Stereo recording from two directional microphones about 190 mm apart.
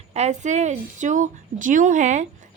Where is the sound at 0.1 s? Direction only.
35° right (ahead or behind).